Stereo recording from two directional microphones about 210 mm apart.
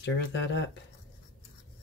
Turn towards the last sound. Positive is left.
turn(degrees=60)  # may be behind; listen again after turning